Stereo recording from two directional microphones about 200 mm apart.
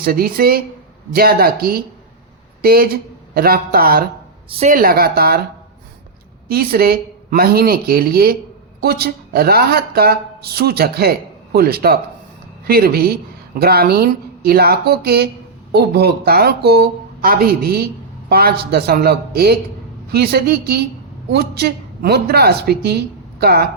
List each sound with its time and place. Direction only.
0.0 s speech: 50° right (ahead or behind)
4.4 s speech: 30° right (ahead or behind)
4.7 s speech: 45° right (ahead or behind)
6.5 s a woman's voice: 50° right (ahead or behind)